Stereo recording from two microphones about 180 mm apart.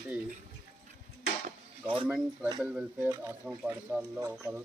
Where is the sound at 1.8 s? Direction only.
30° right (ahead or behind).